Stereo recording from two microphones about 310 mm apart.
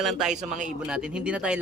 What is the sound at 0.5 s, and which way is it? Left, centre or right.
Speech, right.